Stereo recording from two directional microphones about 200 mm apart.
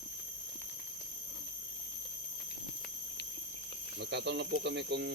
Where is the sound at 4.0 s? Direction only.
60° right (ahead or behind).